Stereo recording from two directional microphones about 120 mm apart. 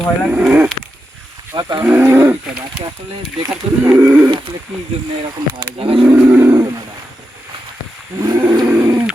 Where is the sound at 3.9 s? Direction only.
15° right (ahead or behind).